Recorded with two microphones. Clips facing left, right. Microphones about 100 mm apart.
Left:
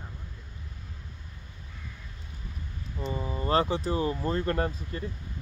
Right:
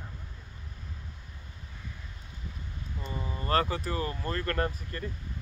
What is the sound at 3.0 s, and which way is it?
Speech, 20° left (ahead or behind).